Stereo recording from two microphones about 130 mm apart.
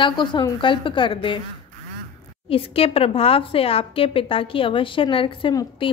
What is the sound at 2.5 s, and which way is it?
A woman's voice, 45° left (ahead or behind).